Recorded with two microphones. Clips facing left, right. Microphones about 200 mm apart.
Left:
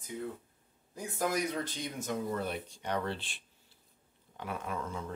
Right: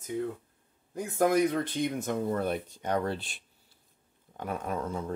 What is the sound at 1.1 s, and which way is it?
Speech, 55° right (ahead or behind).